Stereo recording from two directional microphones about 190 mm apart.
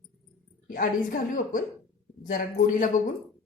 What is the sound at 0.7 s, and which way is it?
A woman's voice, 45° left (ahead or behind).